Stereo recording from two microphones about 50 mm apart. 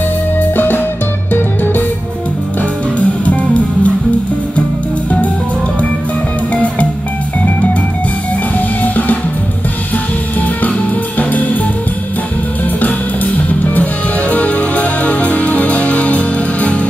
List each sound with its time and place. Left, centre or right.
0.4 s music: left
3.0 s music: left
6.5 s music: left
8.5 s music: left
11.1 s music: left
12.8 s music: left